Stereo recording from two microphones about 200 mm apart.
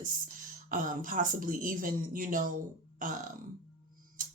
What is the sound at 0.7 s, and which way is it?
Speech, 40° right (ahead or behind).